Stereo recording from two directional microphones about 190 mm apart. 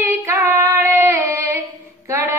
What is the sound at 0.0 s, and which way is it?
Child singing, 15° right (ahead or behind).